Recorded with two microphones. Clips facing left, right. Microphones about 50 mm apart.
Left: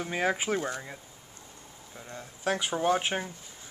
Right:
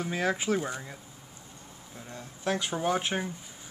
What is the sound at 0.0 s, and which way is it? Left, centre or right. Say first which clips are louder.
Speech: even; centre.